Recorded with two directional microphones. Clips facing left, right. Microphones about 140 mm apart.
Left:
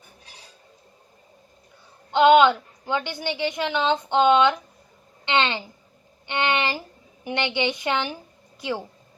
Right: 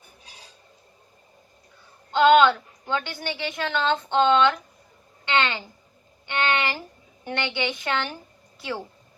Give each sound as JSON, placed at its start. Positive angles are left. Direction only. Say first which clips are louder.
{"t": 2.0, "sound": "a woman's voice", "louder": "left 1 dB", "side_deg": 20}